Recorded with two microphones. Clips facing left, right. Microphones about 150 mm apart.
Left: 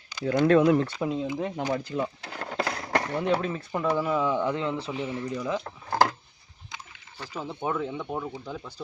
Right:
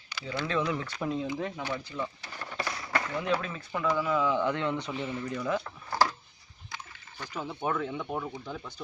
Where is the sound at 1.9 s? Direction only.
60° left (ahead or behind).